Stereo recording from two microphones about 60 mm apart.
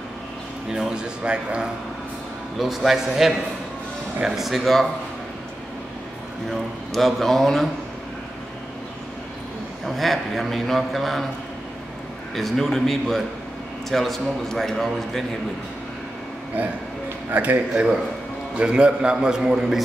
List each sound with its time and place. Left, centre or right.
0.7 s a man's voice: centre
2.6 s a man's voice: centre
6.5 s a man's voice: centre
9.8 s a man's voice: centre
12.4 s a man's voice: centre
17.3 s a man's voice: right
18.6 s a man's voice: centre